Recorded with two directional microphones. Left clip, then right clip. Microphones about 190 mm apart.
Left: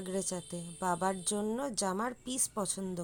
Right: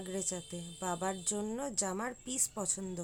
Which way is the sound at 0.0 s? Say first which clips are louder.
Left 2 dB; 15° left (ahead or behind).